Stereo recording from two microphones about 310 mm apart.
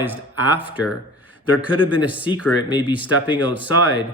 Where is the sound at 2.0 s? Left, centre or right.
Centre.